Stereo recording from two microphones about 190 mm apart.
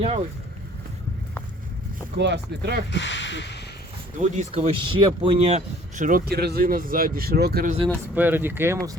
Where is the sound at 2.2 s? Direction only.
65° right (ahead or behind).